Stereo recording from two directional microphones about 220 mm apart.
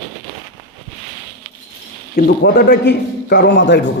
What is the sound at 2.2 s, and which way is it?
A man's voice, 45° left (ahead or behind).